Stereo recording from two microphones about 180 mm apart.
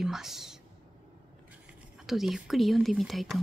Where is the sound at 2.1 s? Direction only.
Centre (ahead or behind).